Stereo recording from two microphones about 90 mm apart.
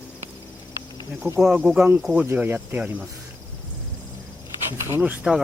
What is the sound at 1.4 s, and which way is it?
Speech, 10° right (ahead or behind).